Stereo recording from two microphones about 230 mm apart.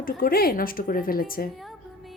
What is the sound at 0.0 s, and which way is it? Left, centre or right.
Speech, left.